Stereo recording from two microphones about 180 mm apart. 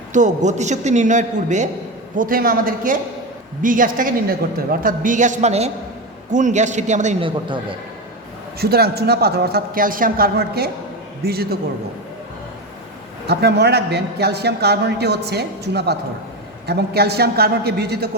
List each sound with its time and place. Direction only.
0.1 s a man's voice: 40° right (ahead or behind)
8.5 s a man's voice: 60° right (ahead or behind)
13.2 s a man's voice: 65° right (ahead or behind)